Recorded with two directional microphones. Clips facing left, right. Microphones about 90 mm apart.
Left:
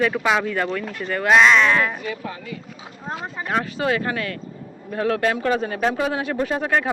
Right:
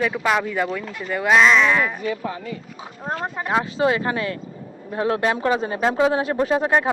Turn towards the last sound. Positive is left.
turn(degrees=-25)  # may be behind; listen again after turning